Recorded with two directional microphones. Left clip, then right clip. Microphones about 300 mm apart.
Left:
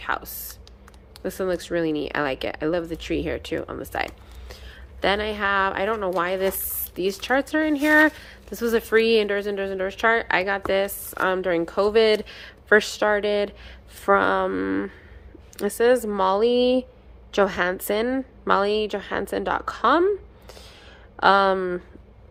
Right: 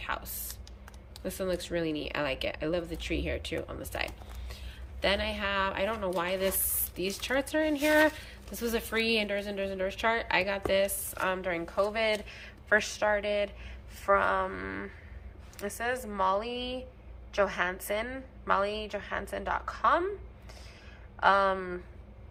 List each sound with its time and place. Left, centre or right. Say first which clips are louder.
0.0 s a woman's voice: left 8 dB; centre
21.2 s a woman's voice: left 7 dB; left